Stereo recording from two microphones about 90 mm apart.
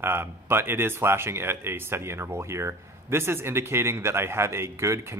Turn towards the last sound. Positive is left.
turn(degrees=-30)  # may be behind; listen again after turning